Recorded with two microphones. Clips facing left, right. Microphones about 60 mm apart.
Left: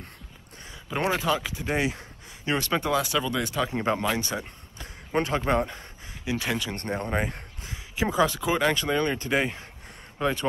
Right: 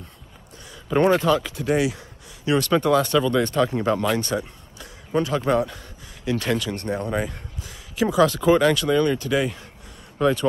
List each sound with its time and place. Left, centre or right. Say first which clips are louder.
0.8 s speech: right 8 dB; centre
1.8 s speech: right 4 dB; left
2.9 s speech: right 7 dB; centre
3.7 s speech: right 4 dB; left
4.0 s speech: right 5 dB; centre
4.7 s a sound: right 3 dB; left
5.5 s speech: right 5 dB; left
6.2 s speech: right 5 dB; centre
6.7 s speech: right 3 dB; left
8.4 s speech: right 8 dB; centre
8.6 s speech: right 5 dB; left
10.2 s speech: right 6 dB; centre